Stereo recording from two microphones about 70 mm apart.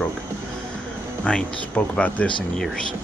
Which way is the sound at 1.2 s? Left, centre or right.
Centre.